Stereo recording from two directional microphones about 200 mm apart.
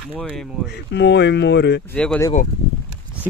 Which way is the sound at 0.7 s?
60° left (ahead or behind).